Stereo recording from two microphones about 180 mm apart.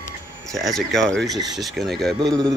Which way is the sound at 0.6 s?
Centre (ahead or behind).